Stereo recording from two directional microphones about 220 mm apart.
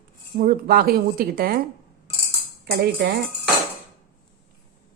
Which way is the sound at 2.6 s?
45° right (ahead or behind).